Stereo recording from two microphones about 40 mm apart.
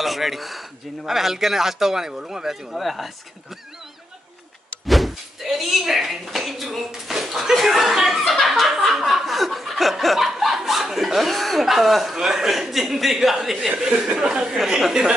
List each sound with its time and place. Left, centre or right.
0.0 s a man's voice: centre
4.8 s a man's voice: centre
8.2 s snicker: centre
12.2 s a man's voice: centre
13.7 s a man's voice: right